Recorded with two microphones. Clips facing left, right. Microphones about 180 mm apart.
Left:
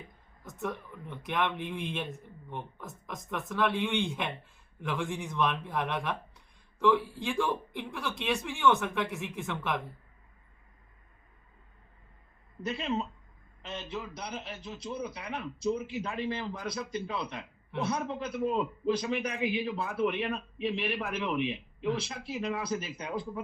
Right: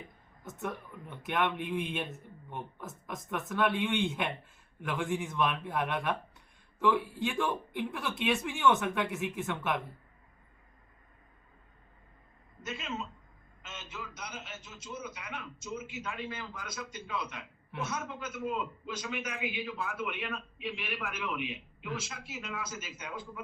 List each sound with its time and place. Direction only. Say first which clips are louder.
0.4 s a man's voice: left 2 dB; 5° right (ahead or behind)
12.6 s a man's voice: left 6 dB; 35° left (ahead or behind)